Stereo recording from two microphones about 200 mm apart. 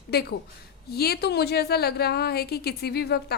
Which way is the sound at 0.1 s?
55° left (ahead or behind).